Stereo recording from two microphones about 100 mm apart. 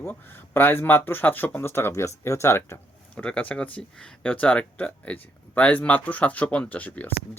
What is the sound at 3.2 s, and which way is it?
Speech, 15° left (ahead or behind).